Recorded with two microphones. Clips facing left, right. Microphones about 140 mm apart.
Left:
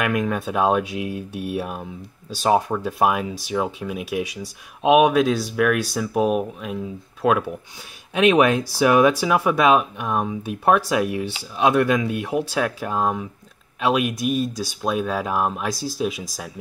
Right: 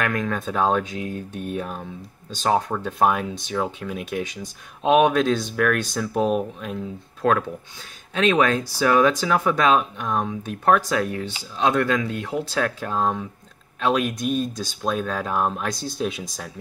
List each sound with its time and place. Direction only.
0.0 s speech: 10° left (ahead or behind)